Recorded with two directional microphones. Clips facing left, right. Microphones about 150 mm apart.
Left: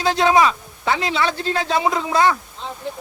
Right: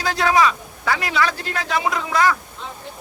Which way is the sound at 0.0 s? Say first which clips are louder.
Left 2 dB; 25° left (ahead or behind).